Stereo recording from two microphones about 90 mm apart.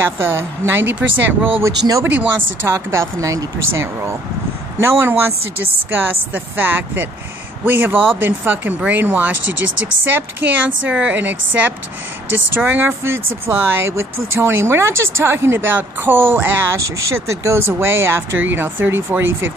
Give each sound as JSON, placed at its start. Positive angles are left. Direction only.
{"t": 0.2, "sound": "speech", "side_deg": -25}
{"t": 1.6, "sound": "speech", "side_deg": -35}
{"t": 2.0, "sound": "a woman's voice", "side_deg": -20}
{"t": 2.7, "sound": "a woman's voice", "side_deg": -30}
{"t": 16.7, "sound": "speech", "side_deg": -35}